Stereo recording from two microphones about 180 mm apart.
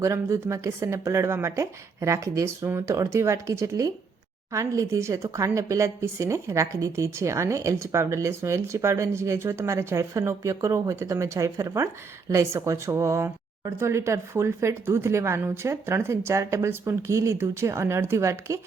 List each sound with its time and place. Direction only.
0.0 s speech: 15° right (ahead or behind)